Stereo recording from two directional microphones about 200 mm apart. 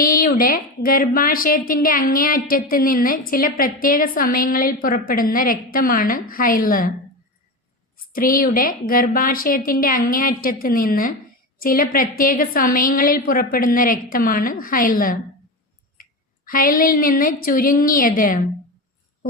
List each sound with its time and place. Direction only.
0.0 s a woman's voice: 45° left (ahead or behind)
8.1 s a woman's voice: 45° left (ahead or behind)
16.5 s a woman's voice: 45° left (ahead or behind)